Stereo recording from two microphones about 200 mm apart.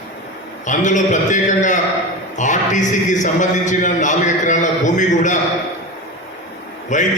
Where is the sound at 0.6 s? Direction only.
40° left (ahead or behind).